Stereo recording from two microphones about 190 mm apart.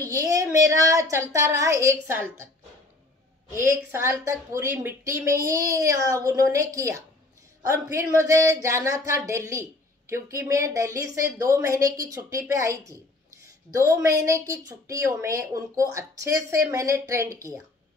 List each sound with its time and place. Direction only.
0.0 s speech: 15° right (ahead or behind)
3.5 s speech: 15° right (ahead or behind)